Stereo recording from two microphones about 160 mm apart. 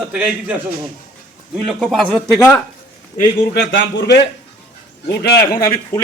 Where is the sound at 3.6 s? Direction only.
90° left.